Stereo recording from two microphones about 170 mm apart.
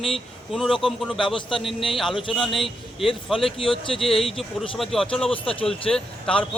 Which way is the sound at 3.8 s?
35° left (ahead or behind).